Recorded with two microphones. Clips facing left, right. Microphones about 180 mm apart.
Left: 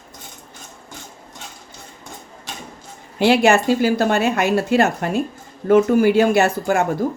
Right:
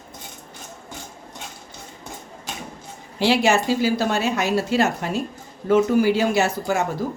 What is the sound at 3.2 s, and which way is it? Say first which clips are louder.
Speech: left 4 dB; 55° left (ahead or behind).